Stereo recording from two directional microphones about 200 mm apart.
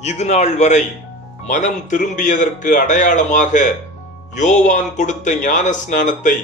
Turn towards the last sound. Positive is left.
turn(degrees=40)  # may be behind; listen again after turning